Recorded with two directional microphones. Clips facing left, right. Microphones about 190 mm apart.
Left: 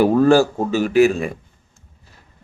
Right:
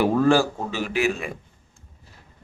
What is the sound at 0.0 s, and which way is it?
A man's voice, 40° left (ahead or behind).